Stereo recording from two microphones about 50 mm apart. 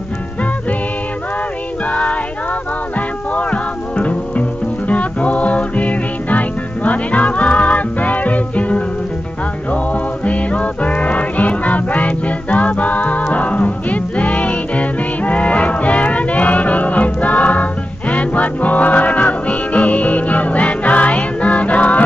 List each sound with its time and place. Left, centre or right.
1.9 s music: left
3.3 s music: left